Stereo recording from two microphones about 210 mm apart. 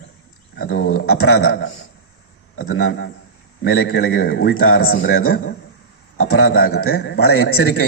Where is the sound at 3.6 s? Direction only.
70° left (ahead or behind).